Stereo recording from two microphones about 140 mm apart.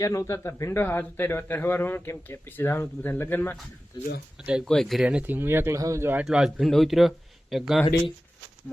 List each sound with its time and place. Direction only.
0.0 s a man's voice: 20° left (ahead or behind)
3.9 s speech: 35° left (ahead or behind)
4.6 s speech: 5° left (ahead or behind); by 6.2 s 15° right (ahead or behind)
6.2 s speech: 5° right (ahead or behind)